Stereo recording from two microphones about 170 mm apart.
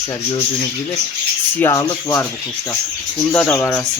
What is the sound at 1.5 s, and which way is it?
Speech, 15° left (ahead or behind).